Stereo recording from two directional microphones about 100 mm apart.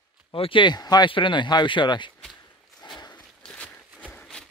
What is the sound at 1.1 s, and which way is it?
Speech, 55° left (ahead or behind).